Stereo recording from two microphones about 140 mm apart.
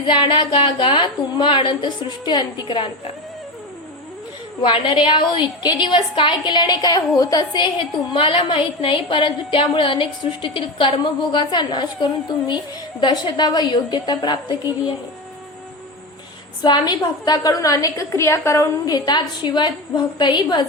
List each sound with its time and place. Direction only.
0.0 s a woman's voice: 35° left (ahead or behind)
4.6 s a woman's voice: 35° left (ahead or behind)
16.6 s a woman's voice: 30° left (ahead or behind)